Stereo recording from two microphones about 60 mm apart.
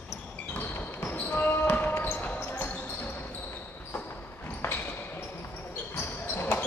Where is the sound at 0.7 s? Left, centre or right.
Left.